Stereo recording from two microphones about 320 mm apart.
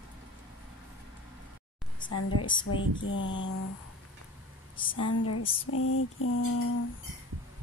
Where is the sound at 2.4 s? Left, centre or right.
Centre.